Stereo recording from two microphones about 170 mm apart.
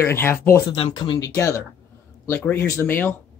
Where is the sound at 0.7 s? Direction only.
25° left (ahead or behind).